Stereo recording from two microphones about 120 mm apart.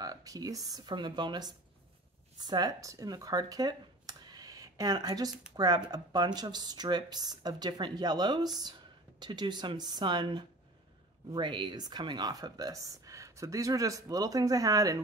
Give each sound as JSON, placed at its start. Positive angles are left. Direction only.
{"t": 0.0, "sound": "speech", "side_deg": -30}